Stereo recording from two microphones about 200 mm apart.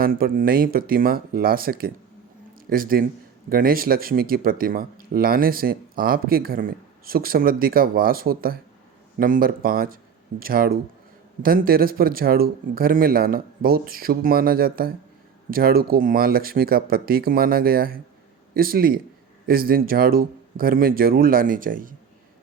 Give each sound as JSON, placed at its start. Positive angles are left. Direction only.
{"t": 0.0, "sound": "speech", "side_deg": -45}